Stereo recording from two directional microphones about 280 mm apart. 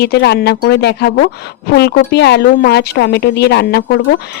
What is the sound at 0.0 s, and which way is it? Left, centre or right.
Speech, left.